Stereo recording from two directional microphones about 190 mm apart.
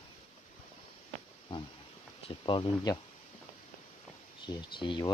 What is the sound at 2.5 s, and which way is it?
Speech, 20° left (ahead or behind).